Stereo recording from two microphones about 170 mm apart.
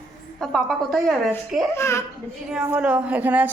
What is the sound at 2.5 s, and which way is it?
A woman's voice, 5° right (ahead or behind).